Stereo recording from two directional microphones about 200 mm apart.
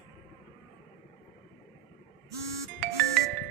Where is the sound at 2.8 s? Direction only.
50° right (ahead or behind).